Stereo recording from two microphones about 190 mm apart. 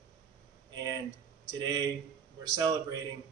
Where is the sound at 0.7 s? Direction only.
20° right (ahead or behind).